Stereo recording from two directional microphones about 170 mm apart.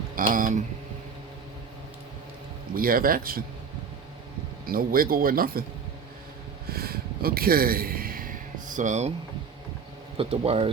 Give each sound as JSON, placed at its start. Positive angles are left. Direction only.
{"t": 0.2, "sound": "speech", "side_deg": -50}
{"t": 2.7, "sound": "speech", "side_deg": -60}
{"t": 4.6, "sound": "speech", "side_deg": -60}
{"t": 6.7, "sound": "gasp", "side_deg": -65}
{"t": 10.2, "sound": "speech", "side_deg": -35}